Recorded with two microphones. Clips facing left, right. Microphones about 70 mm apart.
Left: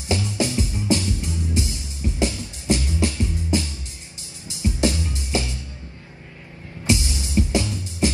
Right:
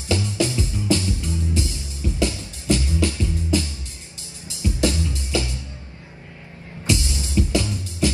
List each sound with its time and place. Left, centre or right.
0.1 s music: left
6.9 s music: left